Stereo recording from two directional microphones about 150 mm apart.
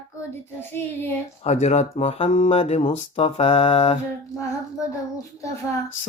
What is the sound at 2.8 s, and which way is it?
Speech, 50° left (ahead or behind).